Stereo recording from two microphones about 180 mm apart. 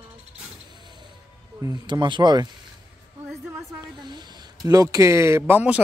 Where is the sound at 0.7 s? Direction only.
25° right (ahead or behind).